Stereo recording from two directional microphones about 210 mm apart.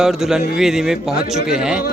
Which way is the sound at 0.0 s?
Centre (ahead or behind).